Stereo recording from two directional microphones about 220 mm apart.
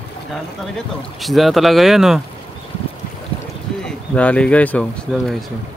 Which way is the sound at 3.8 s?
5° left (ahead or behind).